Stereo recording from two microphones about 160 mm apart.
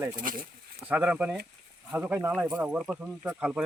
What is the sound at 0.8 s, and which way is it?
Speech, 10° right (ahead or behind).